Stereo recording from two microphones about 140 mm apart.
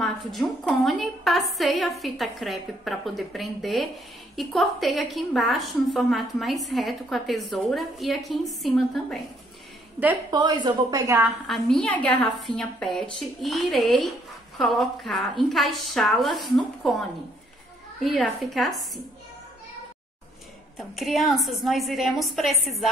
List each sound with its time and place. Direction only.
0.3 s a woman's voice: centre (ahead or behind)
10.3 s a woman's voice: 30° right (ahead or behind)
11.1 s a woman's voice: centre (ahead or behind)
20.7 s a woman's voice: centre (ahead or behind)